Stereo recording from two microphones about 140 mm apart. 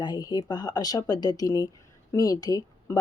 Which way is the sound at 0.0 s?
30° left (ahead or behind).